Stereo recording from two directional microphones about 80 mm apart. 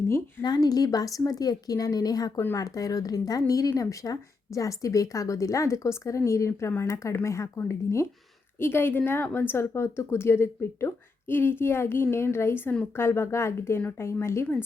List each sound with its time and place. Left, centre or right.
0.4 s a woman's voice: left